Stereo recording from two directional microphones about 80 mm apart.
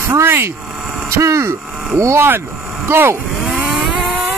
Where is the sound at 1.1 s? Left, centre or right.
Right.